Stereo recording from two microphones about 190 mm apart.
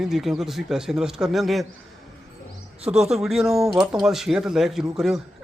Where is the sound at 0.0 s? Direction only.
Centre (ahead or behind).